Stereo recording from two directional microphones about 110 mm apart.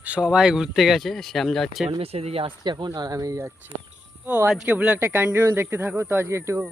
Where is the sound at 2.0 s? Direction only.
65° right (ahead or behind).